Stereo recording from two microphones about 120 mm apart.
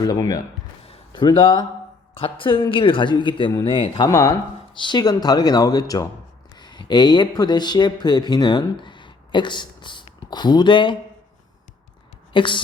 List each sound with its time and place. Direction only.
0.0 s speech: 30° left (ahead or behind)
1.1 s a man's voice: 40° left (ahead or behind)
8.7 s a sound: 40° left (ahead or behind)
12.3 s a man's voice: 45° left (ahead or behind)